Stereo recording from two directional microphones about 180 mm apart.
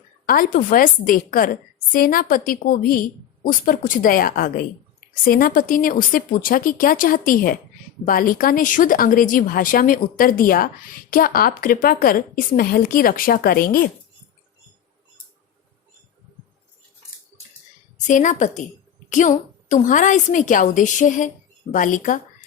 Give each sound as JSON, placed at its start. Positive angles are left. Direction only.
{"t": 0.3, "sound": "speech", "side_deg": 50}
{"t": 17.9, "sound": "a woman's voice", "side_deg": 45}